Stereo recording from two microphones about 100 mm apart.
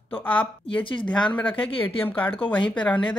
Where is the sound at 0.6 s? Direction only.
60° left (ahead or behind).